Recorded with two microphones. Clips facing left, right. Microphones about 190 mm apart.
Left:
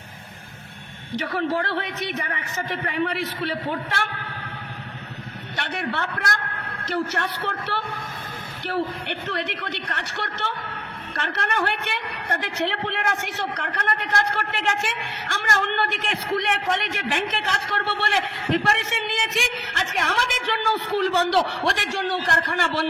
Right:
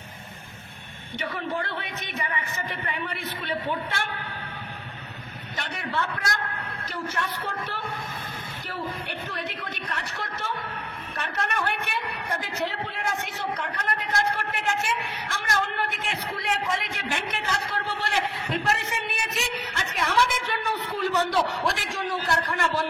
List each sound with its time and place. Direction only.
1.1 s a man's voice: 70° left (ahead or behind)
5.9 s a man's voice: 70° left (ahead or behind)